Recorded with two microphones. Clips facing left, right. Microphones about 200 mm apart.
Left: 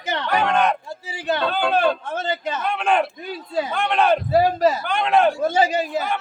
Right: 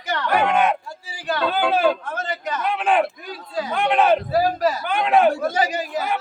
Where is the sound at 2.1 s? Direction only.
25° left (ahead or behind).